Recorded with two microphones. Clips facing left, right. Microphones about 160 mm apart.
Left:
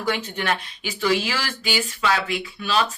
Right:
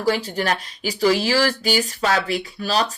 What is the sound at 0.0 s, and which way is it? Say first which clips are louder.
Speech: right 4 dB; 35° right (ahead or behind).